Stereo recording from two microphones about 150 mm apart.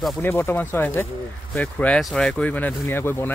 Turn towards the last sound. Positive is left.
turn(degrees=15)  # may be behind; listen again after turning